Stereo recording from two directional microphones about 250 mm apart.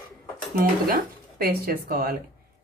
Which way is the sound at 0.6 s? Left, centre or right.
Right.